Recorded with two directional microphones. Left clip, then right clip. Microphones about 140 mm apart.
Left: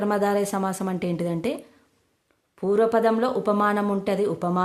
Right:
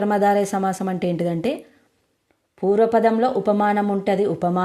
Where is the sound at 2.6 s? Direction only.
20° right (ahead or behind).